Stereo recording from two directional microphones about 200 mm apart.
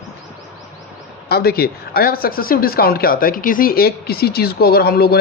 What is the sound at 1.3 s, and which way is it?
Speech, 50° left (ahead or behind).